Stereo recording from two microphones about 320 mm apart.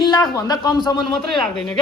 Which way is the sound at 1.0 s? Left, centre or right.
Centre.